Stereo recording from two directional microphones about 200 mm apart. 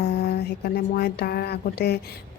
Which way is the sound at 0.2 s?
50° left (ahead or behind).